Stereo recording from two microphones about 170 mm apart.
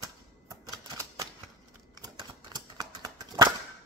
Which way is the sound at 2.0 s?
25° right (ahead or behind).